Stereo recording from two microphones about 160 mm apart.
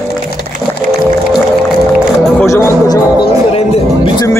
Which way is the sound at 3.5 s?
40° left (ahead or behind).